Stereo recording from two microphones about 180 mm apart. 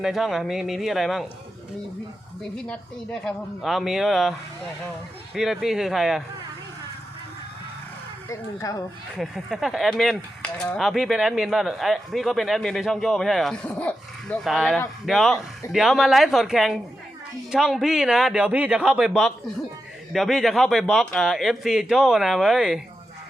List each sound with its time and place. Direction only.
0.0 s speech: centre (ahead or behind)
2.6 s speech: 5° left (ahead or behind)
8.3 s speech: 20° left (ahead or behind)
9.1 s speech: centre (ahead or behind)